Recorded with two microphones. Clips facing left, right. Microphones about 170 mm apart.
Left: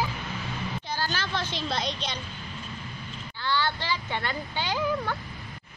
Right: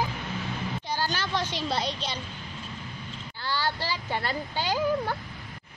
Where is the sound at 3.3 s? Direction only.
40° right (ahead or behind).